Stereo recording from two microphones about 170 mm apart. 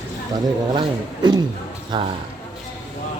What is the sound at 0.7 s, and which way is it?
A man's voice, 25° right (ahead or behind).